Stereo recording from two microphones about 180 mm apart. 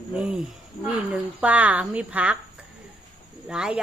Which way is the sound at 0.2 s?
5° right (ahead or behind).